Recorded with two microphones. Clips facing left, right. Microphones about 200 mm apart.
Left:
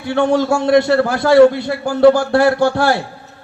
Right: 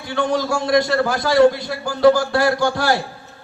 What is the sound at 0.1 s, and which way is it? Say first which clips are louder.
A man's voice: left 6 dB; 60° left (ahead or behind).